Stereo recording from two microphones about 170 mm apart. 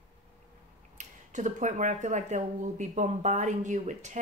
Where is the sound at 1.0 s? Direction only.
45° right (ahead or behind).